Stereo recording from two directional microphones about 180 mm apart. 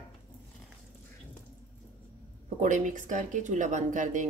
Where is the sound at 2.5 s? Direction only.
45° right (ahead or behind).